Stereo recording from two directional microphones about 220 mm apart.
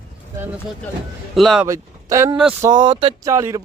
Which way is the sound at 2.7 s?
20° right (ahead or behind).